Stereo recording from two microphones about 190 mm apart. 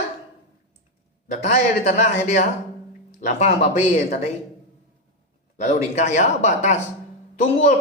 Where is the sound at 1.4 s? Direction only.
35° left (ahead or behind).